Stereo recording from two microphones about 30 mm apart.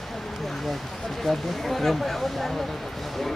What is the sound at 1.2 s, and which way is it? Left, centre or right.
Speech, centre.